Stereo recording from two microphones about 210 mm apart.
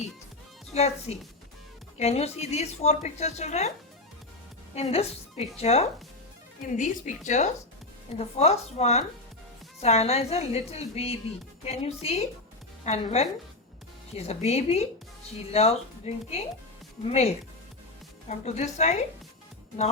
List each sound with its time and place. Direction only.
0.7 s a woman's voice: 30° left (ahead or behind)
4.7 s a woman's voice: 30° left (ahead or behind)